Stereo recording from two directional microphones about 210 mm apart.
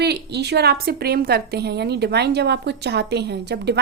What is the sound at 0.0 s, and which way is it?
A woman's voice, 50° right (ahead or behind).